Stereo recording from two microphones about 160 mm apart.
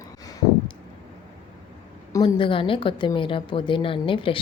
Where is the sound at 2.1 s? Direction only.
30° left (ahead or behind).